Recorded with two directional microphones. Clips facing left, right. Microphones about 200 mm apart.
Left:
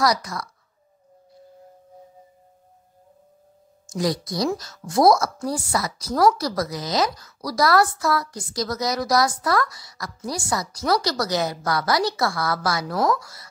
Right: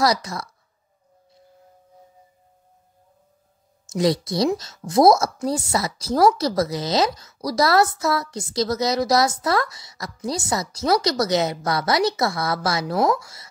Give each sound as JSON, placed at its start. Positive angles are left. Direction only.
{"t": 0.0, "sound": "a woman's voice", "side_deg": -25}
{"t": 3.9, "sound": "a woman's voice", "side_deg": -25}